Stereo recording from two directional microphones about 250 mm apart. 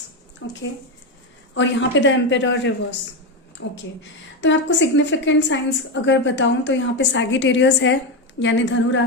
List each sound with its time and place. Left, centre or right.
0.4 s a woman's voice: left